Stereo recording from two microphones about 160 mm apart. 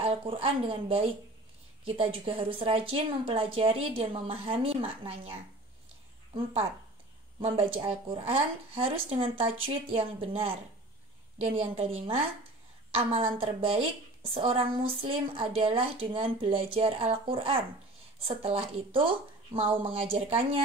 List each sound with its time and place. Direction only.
0.0 s a woman's voice: 35° right (ahead or behind)
6.3 s a woman's voice: 35° right (ahead or behind)